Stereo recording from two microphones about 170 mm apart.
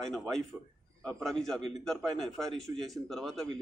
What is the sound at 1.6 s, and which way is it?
Speech, 40° left (ahead or behind).